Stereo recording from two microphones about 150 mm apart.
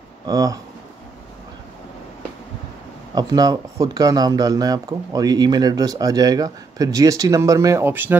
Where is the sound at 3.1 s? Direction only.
25° right (ahead or behind).